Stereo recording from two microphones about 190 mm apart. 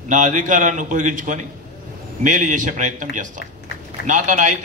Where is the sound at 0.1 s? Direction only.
40° right (ahead or behind).